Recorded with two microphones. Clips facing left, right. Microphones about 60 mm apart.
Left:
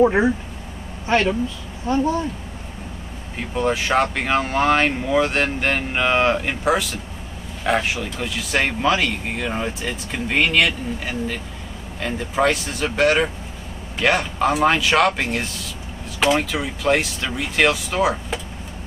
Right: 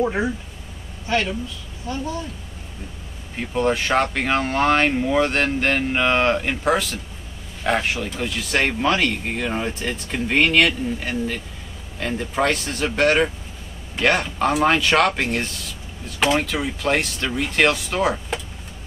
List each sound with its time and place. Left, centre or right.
0.0 s speech: left
1.9 s speech: left
3.3 s a man's voice: centre